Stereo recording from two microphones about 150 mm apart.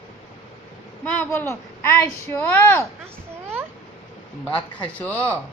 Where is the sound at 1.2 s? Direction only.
15° left (ahead or behind).